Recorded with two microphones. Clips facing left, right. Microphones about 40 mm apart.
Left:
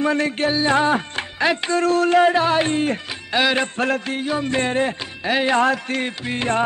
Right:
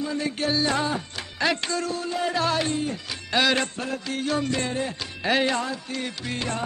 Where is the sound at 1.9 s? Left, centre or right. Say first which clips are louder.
Left 13 dB; left.